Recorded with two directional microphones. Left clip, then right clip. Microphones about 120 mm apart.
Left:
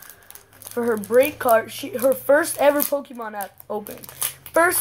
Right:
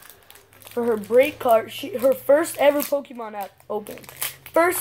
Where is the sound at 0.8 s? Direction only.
10° right (ahead or behind).